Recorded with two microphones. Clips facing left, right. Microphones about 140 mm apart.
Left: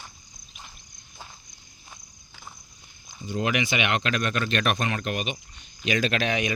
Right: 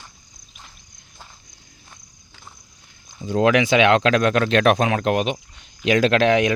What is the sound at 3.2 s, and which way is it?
Speech, 90° right.